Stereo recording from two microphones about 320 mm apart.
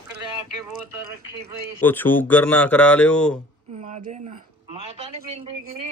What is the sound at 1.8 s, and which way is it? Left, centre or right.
Speech, centre.